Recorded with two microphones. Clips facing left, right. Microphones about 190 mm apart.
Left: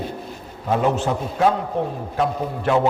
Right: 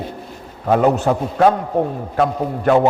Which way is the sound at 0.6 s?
55° right (ahead or behind).